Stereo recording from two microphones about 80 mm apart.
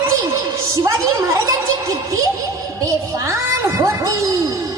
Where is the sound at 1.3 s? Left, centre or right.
Right.